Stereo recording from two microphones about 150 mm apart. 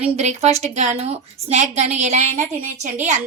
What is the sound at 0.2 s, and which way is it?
A woman's voice, 50° right (ahead or behind).